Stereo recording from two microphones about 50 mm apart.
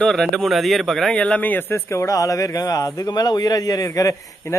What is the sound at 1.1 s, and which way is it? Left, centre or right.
Speech, left.